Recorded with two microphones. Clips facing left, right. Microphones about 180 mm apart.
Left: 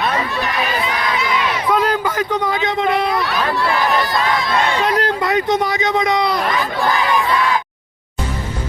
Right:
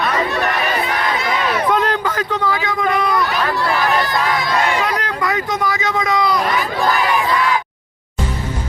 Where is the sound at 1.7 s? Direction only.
5° left (ahead or behind); by 3.2 s 30° left (ahead or behind).